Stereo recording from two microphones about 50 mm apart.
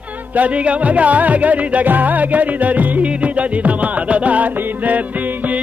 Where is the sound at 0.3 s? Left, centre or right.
Right.